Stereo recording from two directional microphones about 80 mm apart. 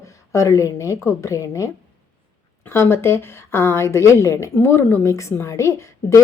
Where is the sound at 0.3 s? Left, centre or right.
Left.